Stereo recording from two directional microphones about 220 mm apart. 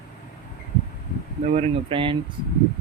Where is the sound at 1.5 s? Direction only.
25° right (ahead or behind).